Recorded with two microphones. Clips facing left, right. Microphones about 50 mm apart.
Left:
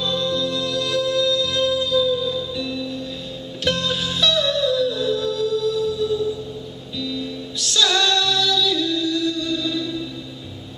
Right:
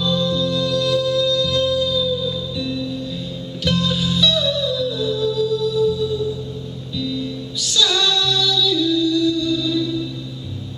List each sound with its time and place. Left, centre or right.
0.0 s music: centre
2.1 s music: centre
3.6 s music: centre